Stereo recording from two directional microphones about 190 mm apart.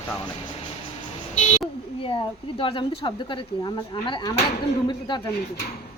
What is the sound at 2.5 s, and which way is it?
Speech, 30° left (ahead or behind).